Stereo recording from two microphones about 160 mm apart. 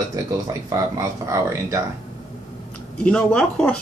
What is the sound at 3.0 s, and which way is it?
Speech, 5° left (ahead or behind).